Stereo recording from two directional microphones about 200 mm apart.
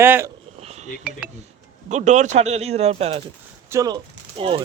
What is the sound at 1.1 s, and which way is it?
Speech, 5° right (ahead or behind).